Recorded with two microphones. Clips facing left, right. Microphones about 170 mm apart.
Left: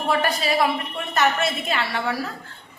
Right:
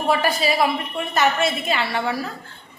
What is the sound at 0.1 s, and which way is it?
A woman's voice, 5° right (ahead or behind).